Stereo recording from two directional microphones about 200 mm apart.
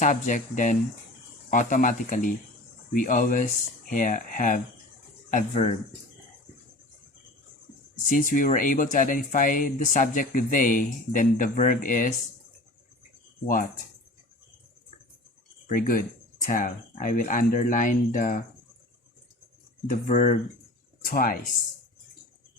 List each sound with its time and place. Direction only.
0.0 s speech: 40° left (ahead or behind)
8.1 s speech: 40° left (ahead or behind)
15.7 s speech: 45° left (ahead or behind)
20.1 s speech: 35° left (ahead or behind)